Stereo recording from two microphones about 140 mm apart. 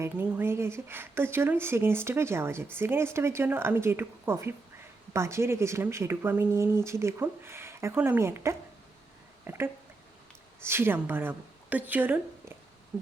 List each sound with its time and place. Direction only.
0.0 s a woman's voice: 15° right (ahead or behind)
9.4 s a sound: 15° right (ahead or behind)
10.6 s a woman's voice: 15° right (ahead or behind)